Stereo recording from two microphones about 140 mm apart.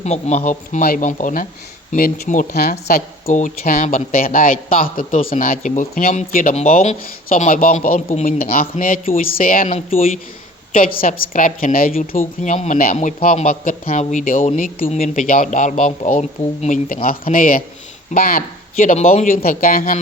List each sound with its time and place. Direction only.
0.0 s a man's voice: 55° left (ahead or behind); by 2.7 s 90° left
3.2 s a woman's voice: 75° left (ahead or behind)
5.4 s a woman's voice: 70° left (ahead or behind)
6.1 s a man's voice: 65° left (ahead or behind); by 9.6 s 85° left
9.6 s speech: 45° left (ahead or behind)
10.7 s a woman's voice: 85° left
12.4 s a man's voice: 60° left (ahead or behind); by 18.9 s 90° left
19.1 s a man's voice: 65° left (ahead or behind)
19.5 s a woman's voice: 90° left